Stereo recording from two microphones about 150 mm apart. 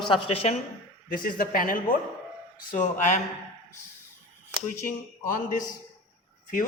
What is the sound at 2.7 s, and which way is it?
Speech, 55° left (ahead or behind).